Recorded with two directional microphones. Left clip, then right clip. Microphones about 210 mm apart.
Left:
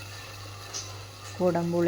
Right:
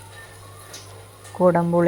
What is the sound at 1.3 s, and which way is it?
Speech, 15° right (ahead or behind).